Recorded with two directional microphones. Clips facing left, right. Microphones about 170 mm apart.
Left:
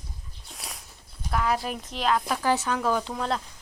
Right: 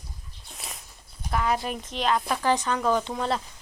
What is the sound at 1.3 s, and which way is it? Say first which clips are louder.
Speech: even; centre (ahead or behind).